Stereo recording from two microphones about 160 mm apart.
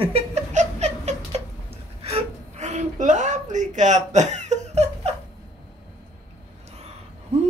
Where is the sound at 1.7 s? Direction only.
40° right (ahead or behind).